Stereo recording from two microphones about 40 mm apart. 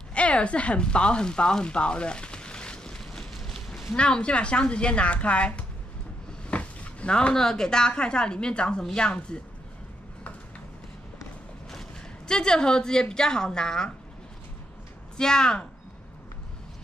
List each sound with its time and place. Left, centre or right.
0.1 s a sound: left; by 3.8 s centre
3.9 s speech: left
6.4 s cupboard open or close: left
7.3 s speech: centre
12.3 s speech: centre
15.1 s speech: centre